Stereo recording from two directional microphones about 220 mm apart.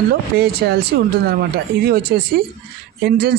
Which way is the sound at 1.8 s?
45° right (ahead or behind).